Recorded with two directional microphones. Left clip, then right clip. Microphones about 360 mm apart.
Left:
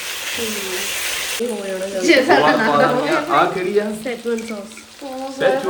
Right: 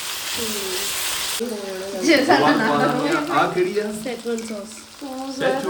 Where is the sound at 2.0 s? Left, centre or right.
Centre.